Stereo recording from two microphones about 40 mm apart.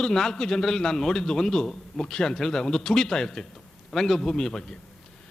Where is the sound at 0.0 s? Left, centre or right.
Centre.